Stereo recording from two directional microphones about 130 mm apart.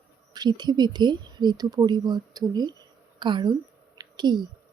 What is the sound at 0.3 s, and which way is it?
A woman's voice, 35° right (ahead or behind).